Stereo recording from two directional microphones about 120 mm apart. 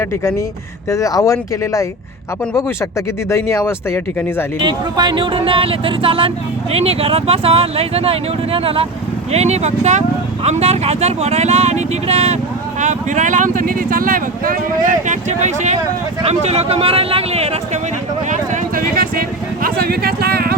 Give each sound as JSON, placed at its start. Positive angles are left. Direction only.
{"t": 0.9, "sound": "speech", "side_deg": 25}
{"t": 3.2, "sound": "speech", "side_deg": 20}
{"t": 4.6, "sound": "speech", "side_deg": -40}
{"t": 9.3, "sound": "speech", "side_deg": -65}
{"t": 12.8, "sound": "speech", "side_deg": -90}
{"t": 15.0, "sound": "speech", "side_deg": -85}
{"t": 16.2, "sound": "speech", "side_deg": -60}